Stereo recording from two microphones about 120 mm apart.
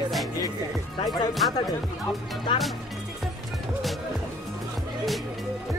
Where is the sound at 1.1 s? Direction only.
Centre (ahead or behind).